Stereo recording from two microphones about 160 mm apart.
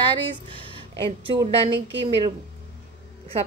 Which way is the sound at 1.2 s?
30° right (ahead or behind).